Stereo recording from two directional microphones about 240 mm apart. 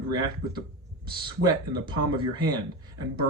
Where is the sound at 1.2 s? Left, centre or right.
Centre.